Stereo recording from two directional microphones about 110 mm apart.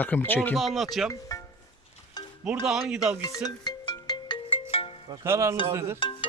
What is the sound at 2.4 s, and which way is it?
Speech, 10° right (ahead or behind).